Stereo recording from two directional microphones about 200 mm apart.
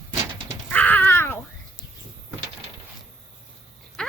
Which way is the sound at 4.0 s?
5° left (ahead or behind).